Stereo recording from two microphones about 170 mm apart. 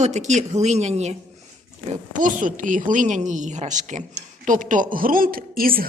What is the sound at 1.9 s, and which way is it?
Speech, 50° right (ahead or behind).